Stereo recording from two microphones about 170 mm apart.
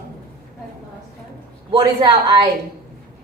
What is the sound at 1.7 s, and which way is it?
Speech, 25° right (ahead or behind).